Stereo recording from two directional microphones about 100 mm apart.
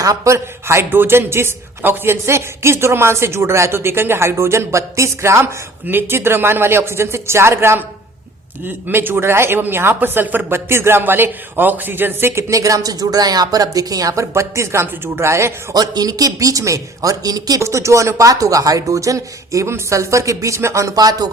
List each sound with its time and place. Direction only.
0.0 s a woman's voice: 35° right (ahead or behind)
15.7 s a man's voice: 40° right (ahead or behind)